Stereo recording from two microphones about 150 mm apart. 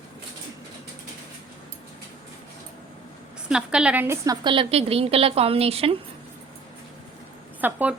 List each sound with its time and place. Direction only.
3.5 s a woman's voice: 5° right (ahead or behind)
4.4 s a woman's voice: 40° right (ahead or behind)
7.6 s a woman's voice: 10° right (ahead or behind)